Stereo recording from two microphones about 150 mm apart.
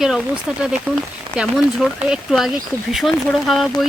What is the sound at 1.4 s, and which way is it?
Speech, 5° right (ahead or behind).